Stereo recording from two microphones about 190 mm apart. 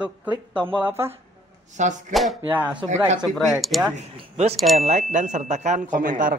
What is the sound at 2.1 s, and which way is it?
Speech, centre (ahead or behind).